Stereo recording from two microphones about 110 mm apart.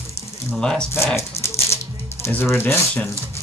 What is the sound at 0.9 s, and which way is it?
Speech, 25° left (ahead or behind).